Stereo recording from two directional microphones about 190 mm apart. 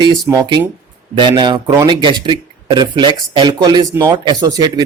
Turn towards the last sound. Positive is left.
turn(degrees=-20)  # may be behind; listen again after turning